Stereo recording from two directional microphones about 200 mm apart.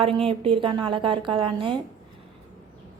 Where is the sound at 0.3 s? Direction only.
25° right (ahead or behind).